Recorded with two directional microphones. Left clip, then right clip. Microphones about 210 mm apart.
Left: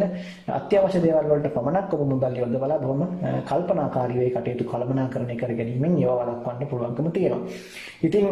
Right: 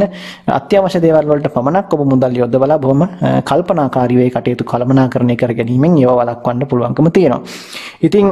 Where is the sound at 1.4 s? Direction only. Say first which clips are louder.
Right 10 dB; 35° right (ahead or behind).